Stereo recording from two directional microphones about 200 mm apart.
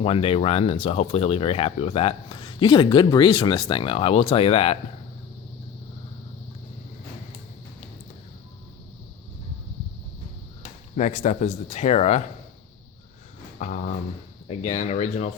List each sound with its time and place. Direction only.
0.0 s a man's voice: 30° left (ahead or behind)
10.6 s speech: 35° left (ahead or behind)
13.6 s speech: 40° left (ahead or behind)